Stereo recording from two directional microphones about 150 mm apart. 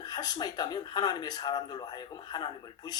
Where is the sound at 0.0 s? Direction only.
25° left (ahead or behind).